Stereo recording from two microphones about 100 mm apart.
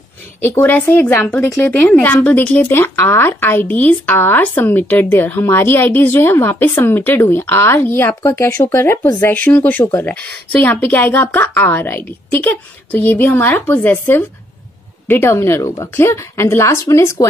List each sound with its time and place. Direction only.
0.4 s a woman's voice: 20° left (ahead or behind)